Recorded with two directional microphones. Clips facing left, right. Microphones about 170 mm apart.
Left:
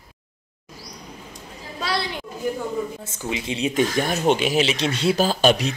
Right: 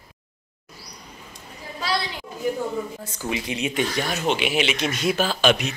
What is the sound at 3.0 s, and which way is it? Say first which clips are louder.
Speech: even; 20° left (ahead or behind).